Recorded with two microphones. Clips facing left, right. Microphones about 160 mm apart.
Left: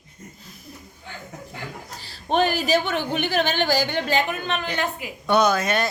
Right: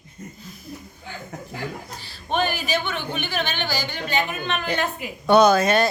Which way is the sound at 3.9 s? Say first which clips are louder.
Left 3 dB; 80° left.